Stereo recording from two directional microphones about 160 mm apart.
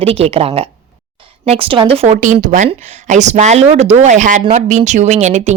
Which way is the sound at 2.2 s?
50° right (ahead or behind).